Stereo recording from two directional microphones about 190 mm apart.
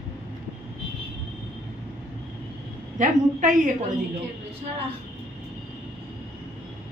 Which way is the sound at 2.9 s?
40° right (ahead or behind).